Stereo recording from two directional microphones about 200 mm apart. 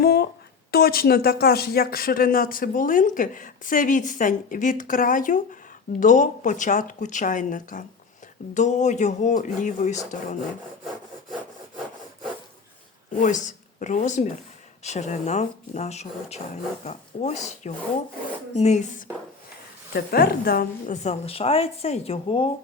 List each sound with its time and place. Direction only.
0.0 s a sound: 55° left (ahead or behind)
0.7 s a woman's voice: 50° left (ahead or behind)
13.2 s a woman's voice: 40° left (ahead or behind)
19.9 s a woman's voice: 50° left (ahead or behind); by 22.4 s 30° left (ahead or behind)